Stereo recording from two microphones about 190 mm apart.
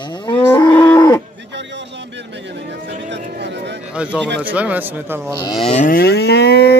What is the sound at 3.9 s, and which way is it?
Speech, 5° right (ahead or behind).